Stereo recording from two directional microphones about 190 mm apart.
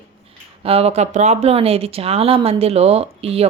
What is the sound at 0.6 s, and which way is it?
Speech, 30° right (ahead or behind).